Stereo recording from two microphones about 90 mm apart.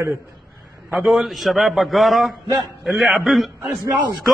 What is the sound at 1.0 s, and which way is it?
A man's voice, centre (ahead or behind).